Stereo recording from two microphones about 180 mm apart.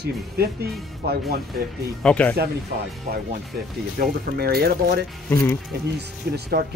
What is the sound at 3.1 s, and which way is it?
Speech, 60° right (ahead or behind).